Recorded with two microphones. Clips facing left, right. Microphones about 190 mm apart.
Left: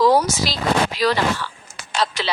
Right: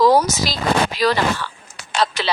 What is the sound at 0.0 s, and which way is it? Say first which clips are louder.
Speech: right 1 dB; 40° right (ahead or behind).